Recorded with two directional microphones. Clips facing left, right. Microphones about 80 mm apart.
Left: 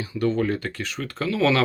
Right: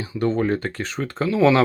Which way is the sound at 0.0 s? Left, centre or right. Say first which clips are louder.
Right 1 dB; right.